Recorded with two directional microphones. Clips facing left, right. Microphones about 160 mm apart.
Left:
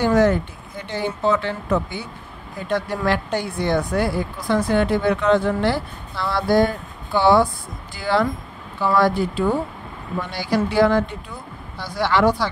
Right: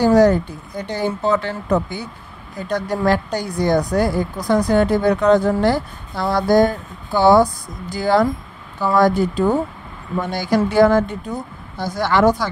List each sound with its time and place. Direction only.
0.0 s speech: 35° right (ahead or behind)